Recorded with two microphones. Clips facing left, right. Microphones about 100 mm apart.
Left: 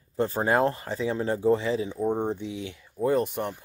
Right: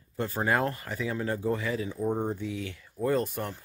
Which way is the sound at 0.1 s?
30° left (ahead or behind).